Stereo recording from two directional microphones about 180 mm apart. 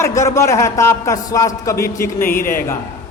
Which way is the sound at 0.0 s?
15° left (ahead or behind).